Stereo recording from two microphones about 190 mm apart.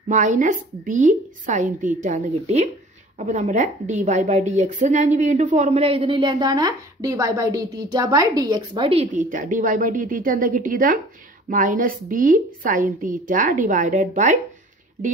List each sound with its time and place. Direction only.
0.1 s a woman's voice: 40° right (ahead or behind)
9.3 s a woman's voice: 45° right (ahead or behind)